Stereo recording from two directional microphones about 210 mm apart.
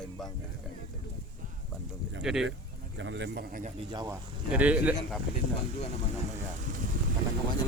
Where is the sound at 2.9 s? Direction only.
60° right (ahead or behind).